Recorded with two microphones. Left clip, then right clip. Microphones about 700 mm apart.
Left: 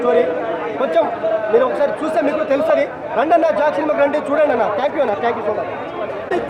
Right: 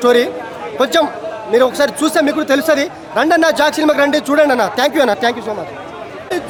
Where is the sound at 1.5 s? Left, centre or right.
Right.